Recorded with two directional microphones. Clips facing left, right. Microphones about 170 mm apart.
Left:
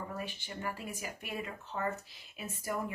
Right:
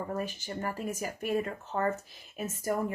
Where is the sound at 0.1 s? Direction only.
45° right (ahead or behind).